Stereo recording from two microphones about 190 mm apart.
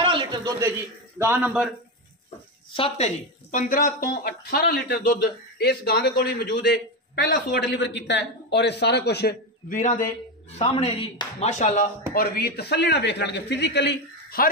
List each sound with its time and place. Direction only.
0.0 s a sound: 25° right (ahead or behind)
1.1 s a man's voice: 10° right (ahead or behind)
2.7 s speech: 30° left (ahead or behind)
3.5 s speech: 45° left (ahead or behind)
6.6 s a man's voice: 65° left (ahead or behind)
9.8 s speech: 40° left (ahead or behind)
10.6 s speech: 30° left (ahead or behind)
12.1 s a man's voice: 55° left (ahead or behind)